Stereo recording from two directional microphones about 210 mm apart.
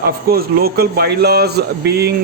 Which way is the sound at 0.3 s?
45° right (ahead or behind).